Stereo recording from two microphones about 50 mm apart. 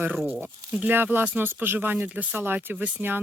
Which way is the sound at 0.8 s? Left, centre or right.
Right.